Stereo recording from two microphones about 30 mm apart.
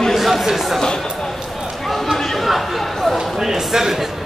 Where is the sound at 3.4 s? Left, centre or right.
Centre.